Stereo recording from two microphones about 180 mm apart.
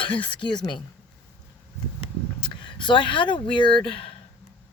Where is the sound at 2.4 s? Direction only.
25° left (ahead or behind).